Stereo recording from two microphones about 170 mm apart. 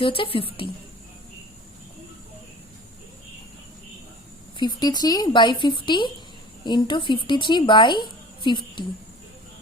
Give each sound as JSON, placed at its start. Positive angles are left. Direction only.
{"t": 0.0, "sound": "a woman's voice", "side_deg": 30}
{"t": 4.5, "sound": "a woman's voice", "side_deg": 25}